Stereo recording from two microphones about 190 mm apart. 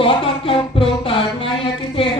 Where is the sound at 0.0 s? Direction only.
30° left (ahead or behind).